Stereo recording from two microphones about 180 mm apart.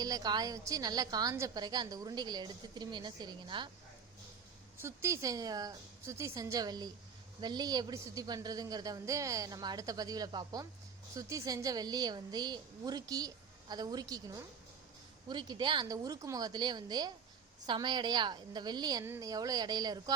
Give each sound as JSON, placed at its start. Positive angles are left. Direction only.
{"t": 0.0, "sound": "a woman's voice", "side_deg": -20}
{"t": 4.8, "sound": "a woman's voice", "side_deg": -15}